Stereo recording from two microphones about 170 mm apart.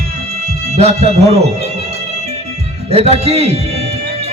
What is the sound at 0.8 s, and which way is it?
Music, 40° right (ahead or behind).